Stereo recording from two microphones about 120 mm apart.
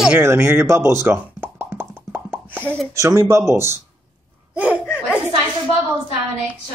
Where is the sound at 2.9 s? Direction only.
25° right (ahead or behind).